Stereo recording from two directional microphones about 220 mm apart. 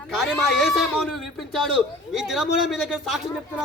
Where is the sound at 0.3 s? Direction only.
Centre (ahead or behind).